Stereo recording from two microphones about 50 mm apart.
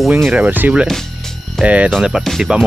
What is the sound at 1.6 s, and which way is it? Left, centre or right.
Speech, right.